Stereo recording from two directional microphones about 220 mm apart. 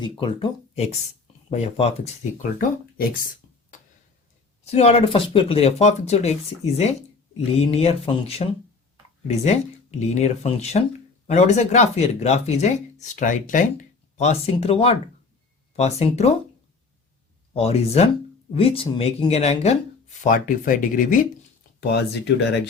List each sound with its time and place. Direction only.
0.0 s speech: 25° left (ahead or behind)
2.4 s speech: 40° left (ahead or behind)
4.6 s speech: 30° left (ahead or behind)
7.6 s speech: 30° left (ahead or behind)
17.5 s speech: 30° left (ahead or behind)
21.8 s speech: 50° left (ahead or behind)